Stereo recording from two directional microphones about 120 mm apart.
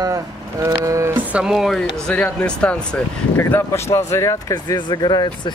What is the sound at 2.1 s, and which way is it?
Speech, 10° left (ahead or behind).